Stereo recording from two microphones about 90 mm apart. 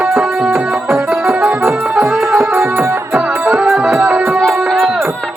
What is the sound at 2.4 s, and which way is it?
Music, 25° right (ahead or behind).